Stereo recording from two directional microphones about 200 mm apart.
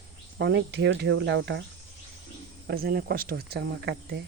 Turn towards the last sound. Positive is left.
turn(degrees=-55)  # may be behind; listen again after turning